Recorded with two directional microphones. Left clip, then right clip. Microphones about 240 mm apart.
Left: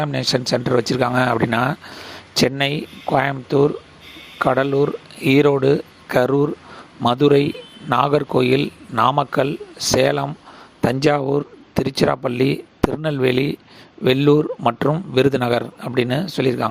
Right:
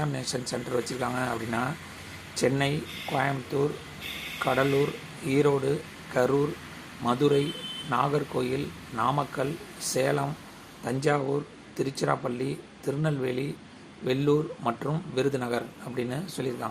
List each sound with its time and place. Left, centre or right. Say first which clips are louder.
0.0 s a man's voice: left 12 dB; left